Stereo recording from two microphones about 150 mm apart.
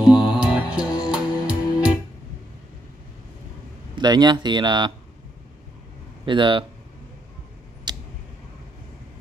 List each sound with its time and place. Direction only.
0.0 s music: 5° right (ahead or behind)
3.9 s speech: 30° right (ahead or behind)
6.2 s speech: 35° right (ahead or behind)
7.9 s a sound: 25° right (ahead or behind)